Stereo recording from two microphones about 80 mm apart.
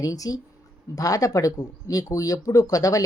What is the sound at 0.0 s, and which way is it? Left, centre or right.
Speech, left.